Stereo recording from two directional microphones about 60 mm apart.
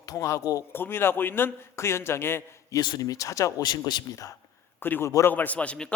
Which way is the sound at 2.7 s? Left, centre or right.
Left.